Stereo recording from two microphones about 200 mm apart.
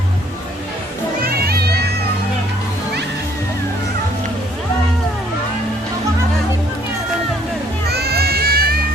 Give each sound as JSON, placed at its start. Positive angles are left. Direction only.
{"t": 1.2, "sound": "music", "side_deg": -50}
{"t": 7.9, "sound": "music", "side_deg": -55}